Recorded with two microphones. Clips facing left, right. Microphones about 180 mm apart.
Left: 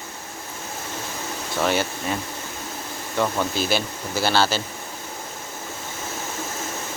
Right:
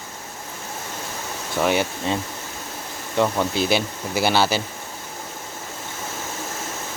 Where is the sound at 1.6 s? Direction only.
20° right (ahead or behind).